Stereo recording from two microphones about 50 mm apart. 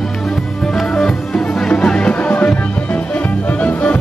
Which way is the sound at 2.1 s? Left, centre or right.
Left.